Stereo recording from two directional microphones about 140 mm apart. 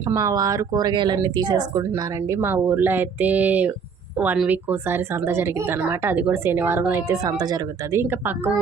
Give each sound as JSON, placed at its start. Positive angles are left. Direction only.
{"t": 0.1, "sound": "speech", "side_deg": -25}
{"t": 2.3, "sound": "a woman's voice", "side_deg": -15}